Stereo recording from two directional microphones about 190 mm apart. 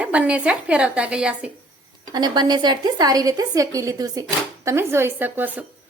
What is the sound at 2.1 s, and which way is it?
A woman's voice, 20° right (ahead or behind).